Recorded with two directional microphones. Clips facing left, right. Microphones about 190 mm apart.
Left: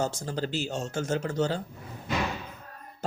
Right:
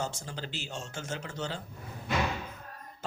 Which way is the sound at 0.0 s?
40° left (ahead or behind).